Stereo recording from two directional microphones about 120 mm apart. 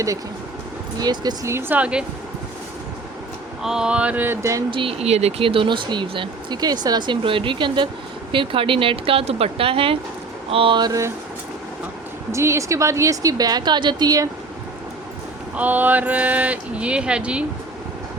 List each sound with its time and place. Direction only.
0.9 s speech: 35° right (ahead or behind)
1.5 s speech: 20° right (ahead or behind)
3.6 s speech: 5° right (ahead or behind); by 4.6 s 20° right (ahead or behind)
4.7 s speech: 50° right (ahead or behind); by 11.1 s 30° right (ahead or behind)
12.3 s a woman's voice: 25° right (ahead or behind)
15.5 s speech: 15° right (ahead or behind)